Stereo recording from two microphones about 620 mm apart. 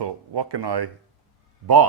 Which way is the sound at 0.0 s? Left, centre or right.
Right.